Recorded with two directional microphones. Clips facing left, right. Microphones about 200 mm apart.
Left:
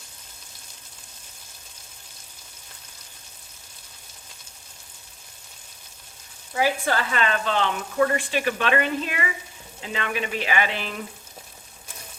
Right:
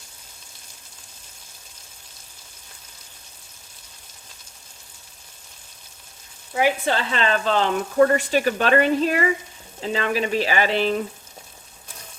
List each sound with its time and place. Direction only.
6.5 s speech: 20° right (ahead or behind)